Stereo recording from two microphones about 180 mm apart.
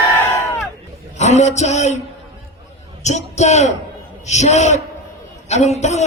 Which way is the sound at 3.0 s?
40° left (ahead or behind).